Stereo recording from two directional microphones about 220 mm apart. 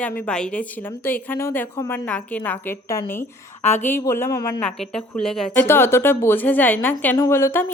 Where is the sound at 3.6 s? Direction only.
30° left (ahead or behind).